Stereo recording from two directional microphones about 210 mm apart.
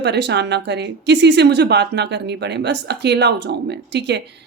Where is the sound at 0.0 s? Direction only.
55° right (ahead or behind).